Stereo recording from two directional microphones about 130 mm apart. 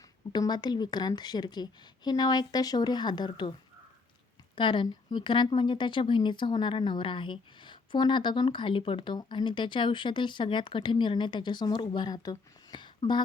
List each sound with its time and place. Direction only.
0.3 s speech: 35° left (ahead or behind)
4.5 s speech: 40° left (ahead or behind)